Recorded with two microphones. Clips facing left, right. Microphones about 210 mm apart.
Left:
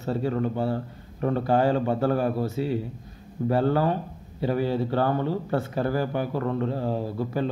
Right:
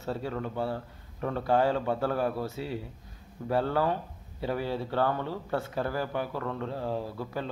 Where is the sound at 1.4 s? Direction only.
5° left (ahead or behind).